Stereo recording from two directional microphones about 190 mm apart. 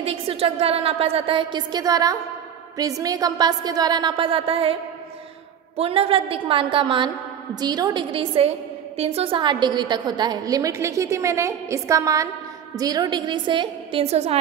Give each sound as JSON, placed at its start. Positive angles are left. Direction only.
{"t": 0.0, "sound": "a woman's voice", "side_deg": -30}
{"t": 5.8, "sound": "a woman's voice", "side_deg": -30}